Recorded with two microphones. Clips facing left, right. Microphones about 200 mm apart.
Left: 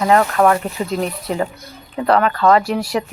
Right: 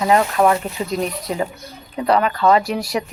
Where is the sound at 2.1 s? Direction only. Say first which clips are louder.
Left 2 dB; 15° right (ahead or behind).